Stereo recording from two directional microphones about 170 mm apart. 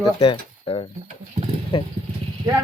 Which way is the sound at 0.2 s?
35° left (ahead or behind).